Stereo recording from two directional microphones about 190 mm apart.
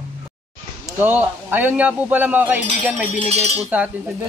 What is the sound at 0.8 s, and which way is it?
A man's voice, 10° right (ahead or behind).